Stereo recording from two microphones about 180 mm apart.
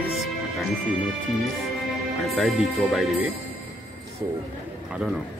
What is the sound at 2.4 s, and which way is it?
Speech, centre (ahead or behind).